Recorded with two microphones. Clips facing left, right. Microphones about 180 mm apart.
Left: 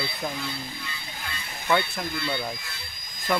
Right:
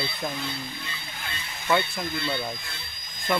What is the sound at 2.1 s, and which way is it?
Speech, 25° right (ahead or behind).